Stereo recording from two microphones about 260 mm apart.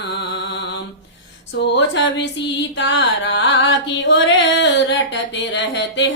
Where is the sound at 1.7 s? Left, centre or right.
Left.